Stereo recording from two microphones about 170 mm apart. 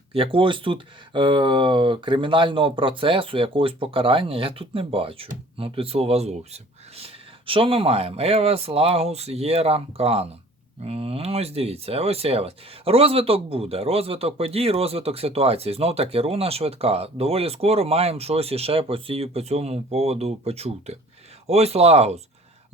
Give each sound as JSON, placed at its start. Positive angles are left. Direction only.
{"t": 0.1, "sound": "speech", "side_deg": -30}